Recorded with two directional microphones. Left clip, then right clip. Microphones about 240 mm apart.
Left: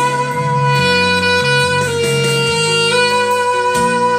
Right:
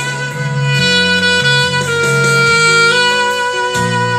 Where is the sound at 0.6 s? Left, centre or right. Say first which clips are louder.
Right 3 dB; right.